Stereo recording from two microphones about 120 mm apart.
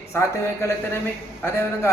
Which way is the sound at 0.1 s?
25° left (ahead or behind).